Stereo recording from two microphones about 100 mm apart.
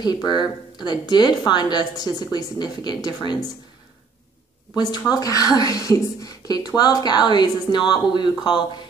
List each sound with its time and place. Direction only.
0.0 s speech: 45° left (ahead or behind)
4.7 s speech: 45° left (ahead or behind)